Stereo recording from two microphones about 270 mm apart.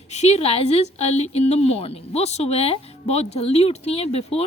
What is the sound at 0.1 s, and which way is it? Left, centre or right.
A woman's voice, left.